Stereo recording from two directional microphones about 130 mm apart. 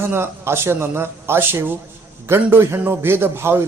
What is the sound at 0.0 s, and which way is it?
A man's voice, 20° right (ahead or behind).